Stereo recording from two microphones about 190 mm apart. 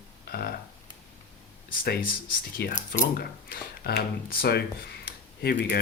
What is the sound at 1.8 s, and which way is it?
Speech, 50° left (ahead or behind).